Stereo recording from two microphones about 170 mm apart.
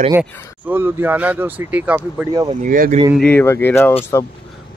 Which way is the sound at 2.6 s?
50° right (ahead or behind).